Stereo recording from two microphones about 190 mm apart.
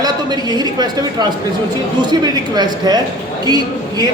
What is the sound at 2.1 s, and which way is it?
A woman's voice, 20° right (ahead or behind).